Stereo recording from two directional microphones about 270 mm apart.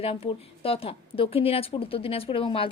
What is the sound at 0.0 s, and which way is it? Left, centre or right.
Speech, centre.